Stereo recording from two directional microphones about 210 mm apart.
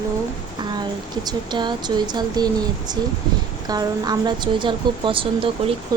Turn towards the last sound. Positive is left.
turn(degrees=-20)  # may be behind; listen again after turning